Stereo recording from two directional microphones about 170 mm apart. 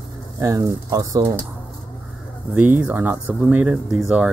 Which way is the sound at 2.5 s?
5° right (ahead or behind).